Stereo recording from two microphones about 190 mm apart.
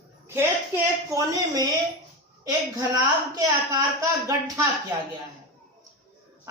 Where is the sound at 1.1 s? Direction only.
20° right (ahead or behind).